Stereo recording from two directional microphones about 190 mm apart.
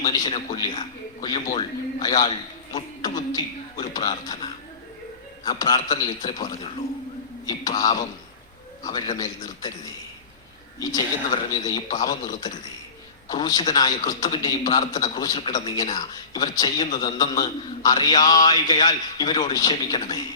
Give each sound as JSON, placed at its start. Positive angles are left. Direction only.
{"t": 0.1, "sound": "a man's voice", "side_deg": 25}
{"t": 3.3, "sound": "a man's voice", "side_deg": 20}
{"t": 5.5, "sound": "a man's voice", "side_deg": 20}
{"t": 7.4, "sound": "a man's voice", "side_deg": 20}